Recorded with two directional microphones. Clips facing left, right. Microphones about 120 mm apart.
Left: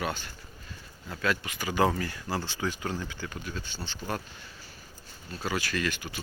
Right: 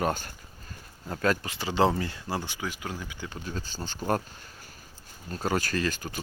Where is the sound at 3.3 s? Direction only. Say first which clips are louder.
Right 2 dB; 30° right (ahead or behind).